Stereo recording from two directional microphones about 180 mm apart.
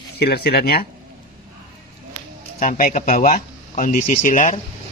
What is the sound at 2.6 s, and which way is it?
Speech, 50° left (ahead or behind).